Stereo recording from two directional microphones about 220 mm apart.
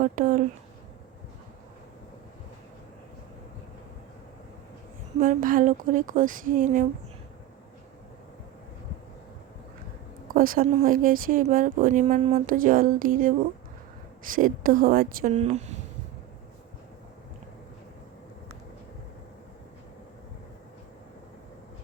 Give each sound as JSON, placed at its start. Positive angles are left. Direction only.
{"t": 0.0, "sound": "speech", "side_deg": -35}
{"t": 5.2, "sound": "speech", "side_deg": -40}
{"t": 10.3, "sound": "speech", "side_deg": -40}